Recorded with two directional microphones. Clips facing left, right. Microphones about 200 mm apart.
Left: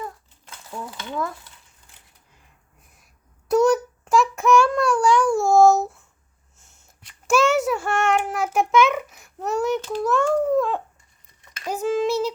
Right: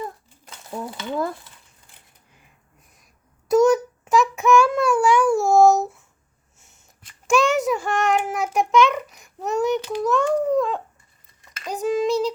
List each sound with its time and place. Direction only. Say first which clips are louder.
0.0 s crumpling: right 2 dB; 30° right (ahead or behind)
3.5 s child singing: right 2 dB; centre (ahead or behind)
7.3 s child singing: even; centre (ahead or behind)
10.0 s speech: left 1 dB; centre (ahead or behind)
11.6 s child singing: even; 5° left (ahead or behind)